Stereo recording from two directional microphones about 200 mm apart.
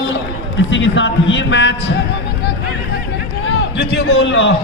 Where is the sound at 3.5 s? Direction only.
65° left (ahead or behind).